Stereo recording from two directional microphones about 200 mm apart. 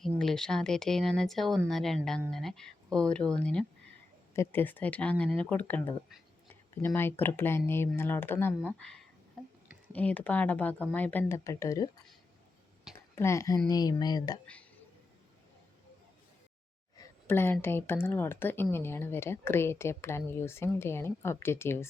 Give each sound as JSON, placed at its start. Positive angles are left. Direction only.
{"t": 0.0, "sound": "speech", "side_deg": 0}
{"t": 13.1, "sound": "speech", "side_deg": 15}
{"t": 17.0, "sound": "speech", "side_deg": 10}